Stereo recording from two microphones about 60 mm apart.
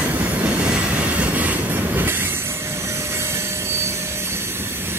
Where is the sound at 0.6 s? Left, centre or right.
Right.